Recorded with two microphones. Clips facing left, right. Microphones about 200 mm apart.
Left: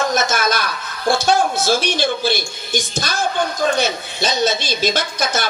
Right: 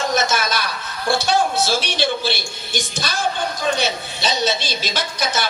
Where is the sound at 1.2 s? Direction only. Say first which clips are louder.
Left 1 dB; 45° left (ahead or behind).